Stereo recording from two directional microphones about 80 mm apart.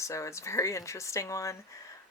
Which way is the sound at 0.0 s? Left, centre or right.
Left.